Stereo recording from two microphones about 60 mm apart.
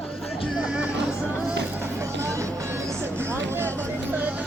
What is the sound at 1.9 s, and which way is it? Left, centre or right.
Music, right.